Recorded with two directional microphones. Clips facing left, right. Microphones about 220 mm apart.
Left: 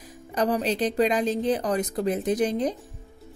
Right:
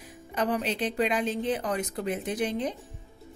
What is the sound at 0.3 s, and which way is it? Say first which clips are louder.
Speech: left 4 dB; 40° left (ahead or behind).